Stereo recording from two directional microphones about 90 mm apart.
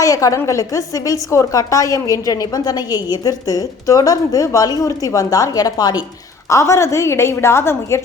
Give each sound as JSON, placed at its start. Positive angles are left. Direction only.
{"t": 0.0, "sound": "a woman's voice", "side_deg": 40}
{"t": 6.5, "sound": "a woman's voice", "side_deg": 35}